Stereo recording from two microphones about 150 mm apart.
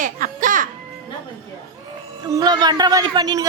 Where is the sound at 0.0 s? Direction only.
60° right (ahead or behind).